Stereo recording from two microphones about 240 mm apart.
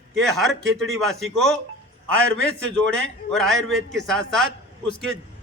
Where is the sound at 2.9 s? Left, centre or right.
Centre.